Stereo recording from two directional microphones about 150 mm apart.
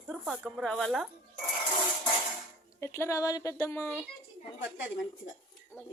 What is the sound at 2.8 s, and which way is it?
Speech, 15° left (ahead or behind).